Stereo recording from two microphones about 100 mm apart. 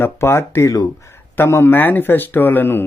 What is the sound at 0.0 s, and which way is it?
Speech, 25° left (ahead or behind).